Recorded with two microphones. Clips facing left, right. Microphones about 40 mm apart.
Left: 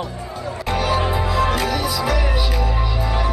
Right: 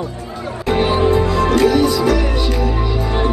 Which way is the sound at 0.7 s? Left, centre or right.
Right.